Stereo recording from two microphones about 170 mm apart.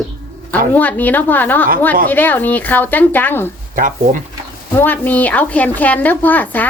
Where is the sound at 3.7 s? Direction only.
50° right (ahead or behind).